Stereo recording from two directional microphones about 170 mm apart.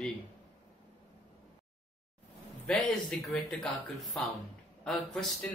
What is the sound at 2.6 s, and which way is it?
Speech, centre (ahead or behind).